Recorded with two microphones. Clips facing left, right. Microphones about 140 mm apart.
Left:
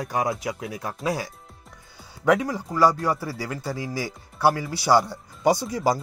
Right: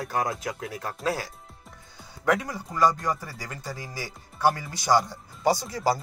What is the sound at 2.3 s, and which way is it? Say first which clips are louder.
Speech: left 5 dB; 10° left (ahead or behind).